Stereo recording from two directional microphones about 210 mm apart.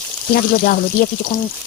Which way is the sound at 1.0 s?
40° left (ahead or behind).